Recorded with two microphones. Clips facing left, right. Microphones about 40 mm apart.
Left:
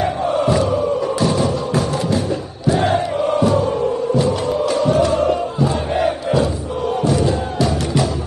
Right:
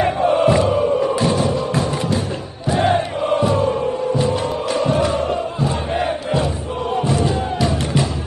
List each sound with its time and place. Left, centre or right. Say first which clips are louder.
0.0 s music: right 2 dB; right
4.8 s chant: left 2 dB; right
7.0 s music: left 1 dB; right